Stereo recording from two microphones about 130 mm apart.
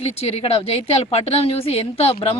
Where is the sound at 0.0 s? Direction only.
50° left (ahead or behind).